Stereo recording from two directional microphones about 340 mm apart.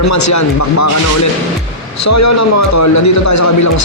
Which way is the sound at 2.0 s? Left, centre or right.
Left.